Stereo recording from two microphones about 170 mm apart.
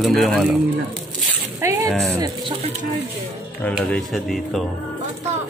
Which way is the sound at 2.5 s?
35° right (ahead or behind).